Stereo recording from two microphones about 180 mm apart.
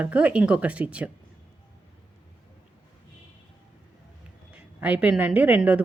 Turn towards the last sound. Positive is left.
turn(degrees=-5)  # may be behind; listen again after turning